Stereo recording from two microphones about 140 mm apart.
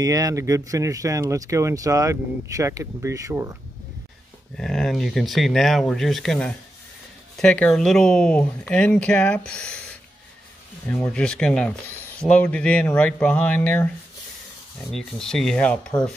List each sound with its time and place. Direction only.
0.0 s speech: 25° right (ahead or behind)
4.6 s speech: 5° left (ahead or behind)
14.9 s speech: 5° left (ahead or behind)